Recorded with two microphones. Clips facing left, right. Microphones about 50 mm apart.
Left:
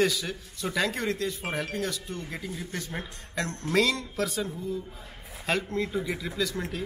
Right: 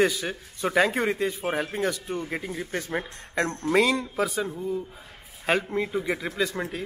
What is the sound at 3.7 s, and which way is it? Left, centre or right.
Speech, centre.